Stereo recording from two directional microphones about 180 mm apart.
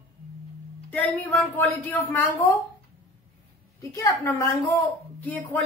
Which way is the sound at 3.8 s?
15° left (ahead or behind).